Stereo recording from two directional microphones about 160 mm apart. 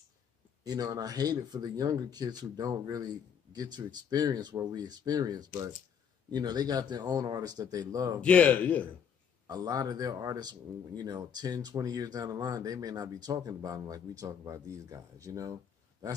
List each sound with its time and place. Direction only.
0.7 s speech: 25° right (ahead or behind)
8.2 s a man's voice: 10° left (ahead or behind)
9.5 s speech: 25° right (ahead or behind)